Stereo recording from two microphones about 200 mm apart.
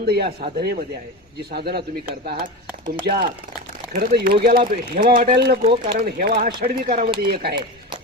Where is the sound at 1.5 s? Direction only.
50° right (ahead or behind).